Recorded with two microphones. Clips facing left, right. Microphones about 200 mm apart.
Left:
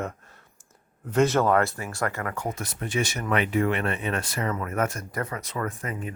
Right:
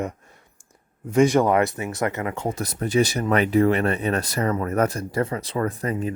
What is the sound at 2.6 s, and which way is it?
Speech, 40° right (ahead or behind).